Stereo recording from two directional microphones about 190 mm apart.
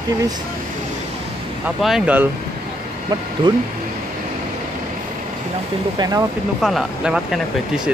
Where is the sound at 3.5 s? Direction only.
25° right (ahead or behind).